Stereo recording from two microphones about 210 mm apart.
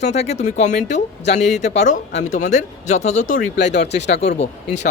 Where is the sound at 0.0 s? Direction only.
30° left (ahead or behind).